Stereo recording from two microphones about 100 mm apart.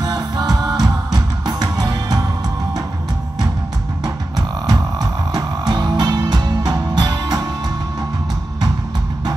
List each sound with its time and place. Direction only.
0.0 s music: 45° right (ahead or behind)
4.6 s music: 45° right (ahead or behind)